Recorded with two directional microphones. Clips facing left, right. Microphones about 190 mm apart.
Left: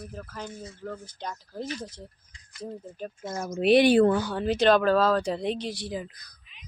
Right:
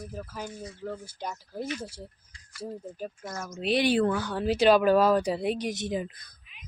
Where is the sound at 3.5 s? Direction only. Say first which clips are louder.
Left 6 dB; 60° left (ahead or behind).